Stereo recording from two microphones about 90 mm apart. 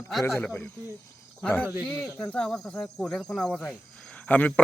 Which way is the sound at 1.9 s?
10° left (ahead or behind).